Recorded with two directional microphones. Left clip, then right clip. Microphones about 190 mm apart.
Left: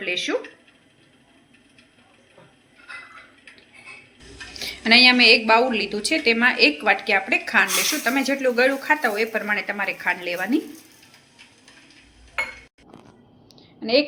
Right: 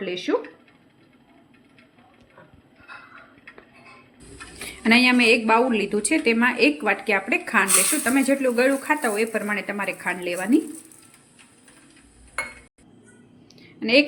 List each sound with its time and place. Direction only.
0.0 s speech: 50° right (ahead or behind)
4.6 s speech: 50° right (ahead or behind)
13.6 s a sound: 65° right (ahead or behind)